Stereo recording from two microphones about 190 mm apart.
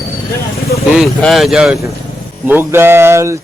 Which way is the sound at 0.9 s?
Centre (ahead or behind).